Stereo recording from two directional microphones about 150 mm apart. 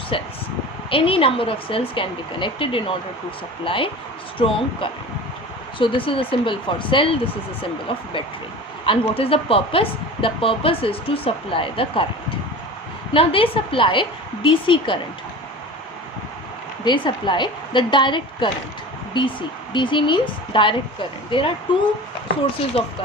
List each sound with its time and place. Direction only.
0.1 s speech: 35° left (ahead or behind)
13.1 s speech: 35° left (ahead or behind)
16.8 s speech: 30° left (ahead or behind)